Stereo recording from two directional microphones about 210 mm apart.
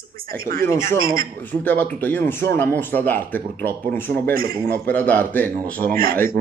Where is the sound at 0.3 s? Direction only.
45° right (ahead or behind).